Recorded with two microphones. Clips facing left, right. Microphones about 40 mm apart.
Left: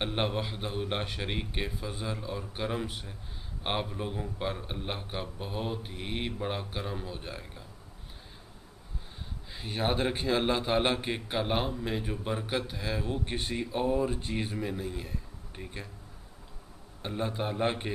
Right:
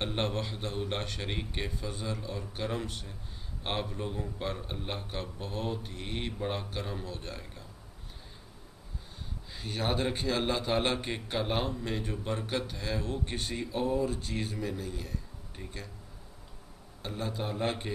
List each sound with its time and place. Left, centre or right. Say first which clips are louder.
0.0 s a man's voice: left 2 dB; centre
9.5 s a man's voice: left 2 dB; centre
17.0 s a man's voice: left 3 dB; centre